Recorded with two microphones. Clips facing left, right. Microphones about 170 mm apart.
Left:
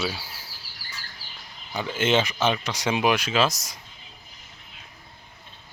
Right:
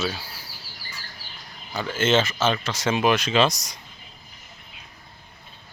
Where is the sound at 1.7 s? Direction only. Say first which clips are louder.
Right 1 dB; 15° left (ahead or behind).